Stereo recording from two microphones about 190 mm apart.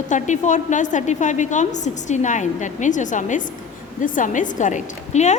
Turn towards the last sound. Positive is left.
turn(degrees=35)  # may be behind; listen again after turning